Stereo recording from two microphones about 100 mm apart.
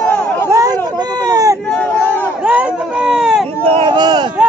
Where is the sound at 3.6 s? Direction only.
90° right.